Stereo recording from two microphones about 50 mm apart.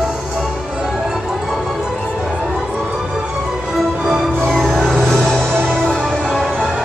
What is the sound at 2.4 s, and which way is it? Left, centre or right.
Emergency vehicle, centre.